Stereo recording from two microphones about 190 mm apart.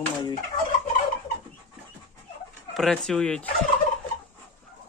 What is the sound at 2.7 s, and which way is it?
Speech, centre (ahead or behind).